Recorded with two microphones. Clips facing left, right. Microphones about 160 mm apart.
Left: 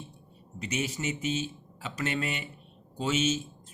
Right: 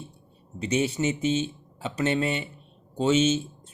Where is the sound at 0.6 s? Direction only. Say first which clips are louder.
Right 8 dB; 30° right (ahead or behind).